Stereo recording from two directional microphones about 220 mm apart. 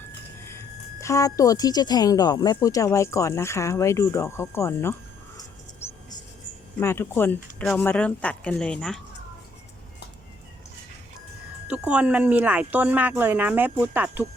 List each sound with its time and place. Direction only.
1.0 s speech: 15° left (ahead or behind)
5.8 s music: 10° left (ahead or behind)
6.7 s speech: 10° left (ahead or behind)
11.7 s a woman's voice: 5° right (ahead or behind)